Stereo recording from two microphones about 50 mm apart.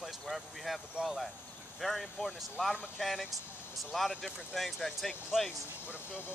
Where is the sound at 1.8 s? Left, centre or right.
Centre.